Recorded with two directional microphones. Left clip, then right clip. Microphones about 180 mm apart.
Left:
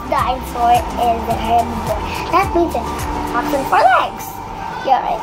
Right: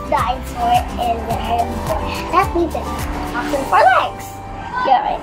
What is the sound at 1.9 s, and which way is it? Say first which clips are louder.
Speech: left 2 dB; centre (ahead or behind).